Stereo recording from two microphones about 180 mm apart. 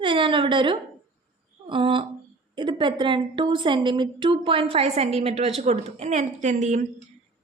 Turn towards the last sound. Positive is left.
turn(degrees=-40)  # may be behind; listen again after turning